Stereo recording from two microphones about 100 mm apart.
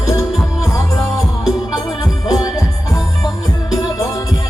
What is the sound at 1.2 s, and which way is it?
Music, centre (ahead or behind).